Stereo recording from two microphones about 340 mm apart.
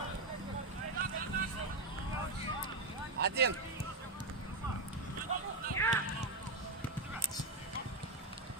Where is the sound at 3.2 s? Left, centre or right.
Right.